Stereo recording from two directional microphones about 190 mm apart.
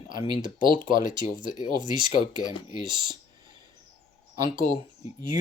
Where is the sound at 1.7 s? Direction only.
25° right (ahead or behind).